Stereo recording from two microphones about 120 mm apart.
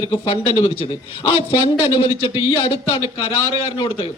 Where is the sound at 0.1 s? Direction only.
50° left (ahead or behind).